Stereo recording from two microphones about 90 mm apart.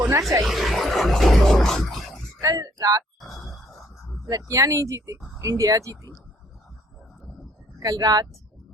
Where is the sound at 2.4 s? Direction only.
40° right (ahead or behind).